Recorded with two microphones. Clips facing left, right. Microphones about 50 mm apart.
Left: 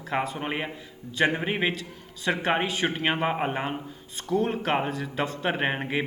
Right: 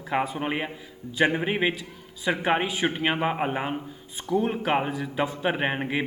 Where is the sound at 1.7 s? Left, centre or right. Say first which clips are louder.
Right 1 dB; centre.